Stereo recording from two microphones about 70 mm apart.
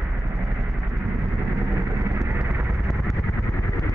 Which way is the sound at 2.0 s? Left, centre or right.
Right.